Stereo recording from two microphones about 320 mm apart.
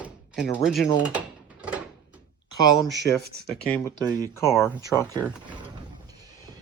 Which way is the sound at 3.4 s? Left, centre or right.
Centre.